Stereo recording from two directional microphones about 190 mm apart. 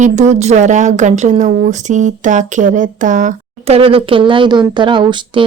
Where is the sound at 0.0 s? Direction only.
40° right (ahead or behind).